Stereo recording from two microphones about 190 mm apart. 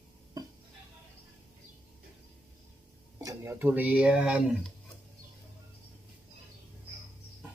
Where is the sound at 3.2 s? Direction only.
15° right (ahead or behind).